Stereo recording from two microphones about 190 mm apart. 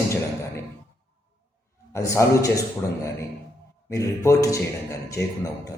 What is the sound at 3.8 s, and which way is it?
Speech, 15° left (ahead or behind).